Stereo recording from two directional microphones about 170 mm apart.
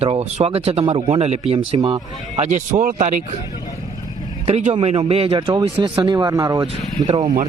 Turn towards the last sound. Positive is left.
turn(degrees=-20)  # may be behind; listen again after turning